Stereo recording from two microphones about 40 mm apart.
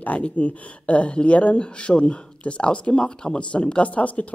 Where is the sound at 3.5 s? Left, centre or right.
Left.